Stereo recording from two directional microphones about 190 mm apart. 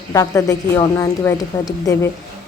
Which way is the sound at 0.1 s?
15° left (ahead or behind).